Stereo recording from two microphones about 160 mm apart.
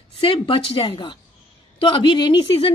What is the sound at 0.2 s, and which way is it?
A woman's voice, 35° left (ahead or behind).